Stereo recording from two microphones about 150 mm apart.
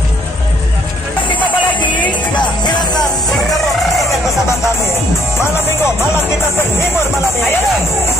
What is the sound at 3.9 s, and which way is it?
Music, centre (ahead or behind).